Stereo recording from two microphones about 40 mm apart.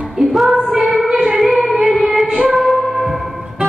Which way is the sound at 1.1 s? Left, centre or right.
Centre.